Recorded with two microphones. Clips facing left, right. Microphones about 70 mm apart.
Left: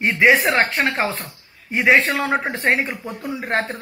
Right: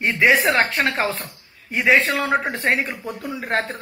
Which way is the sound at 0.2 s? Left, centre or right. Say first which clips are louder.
Left 1 dB; centre.